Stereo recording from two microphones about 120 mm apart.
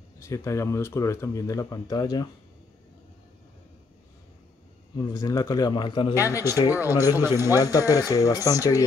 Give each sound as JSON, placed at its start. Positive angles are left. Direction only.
{"t": 0.2, "sound": "speech", "side_deg": 25}
{"t": 4.9, "sound": "a man's voice", "side_deg": 35}
{"t": 6.1, "sound": "speech", "side_deg": 25}
{"t": 6.7, "sound": "a man's voice", "side_deg": -15}
{"t": 7.3, "sound": "speech", "side_deg": 30}